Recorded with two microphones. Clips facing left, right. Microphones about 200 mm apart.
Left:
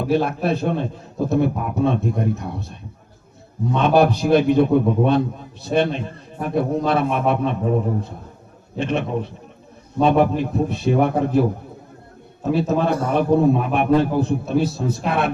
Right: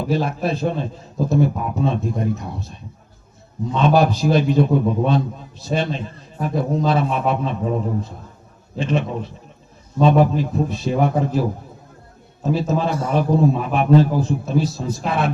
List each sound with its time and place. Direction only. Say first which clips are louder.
0.0 s a man's voice: left 2 dB; 60° left (ahead or behind)
3.8 s a man's voice: even; 60° left (ahead or behind)
8.8 s a man's voice: even; 60° left (ahead or behind)
12.5 s a man's voice: left 3 dB; 60° left (ahead or behind)